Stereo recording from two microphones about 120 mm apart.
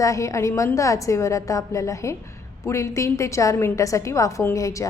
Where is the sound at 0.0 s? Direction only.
25° left (ahead or behind).